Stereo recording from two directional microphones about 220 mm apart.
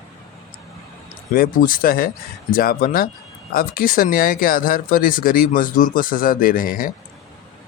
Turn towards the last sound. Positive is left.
turn(degrees=40)  # may be behind; listen again after turning